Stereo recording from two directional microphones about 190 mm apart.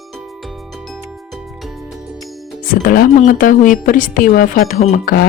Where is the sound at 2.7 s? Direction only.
45° left (ahead or behind).